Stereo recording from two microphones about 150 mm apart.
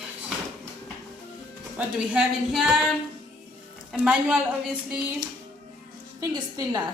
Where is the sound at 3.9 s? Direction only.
5° right (ahead or behind).